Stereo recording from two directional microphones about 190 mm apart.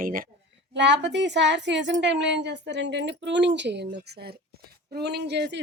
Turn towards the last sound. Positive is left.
turn(degrees=-60)  # may be behind; listen again after turning